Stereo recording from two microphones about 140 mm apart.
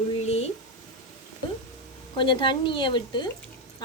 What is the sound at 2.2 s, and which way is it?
Speech, 35° left (ahead or behind).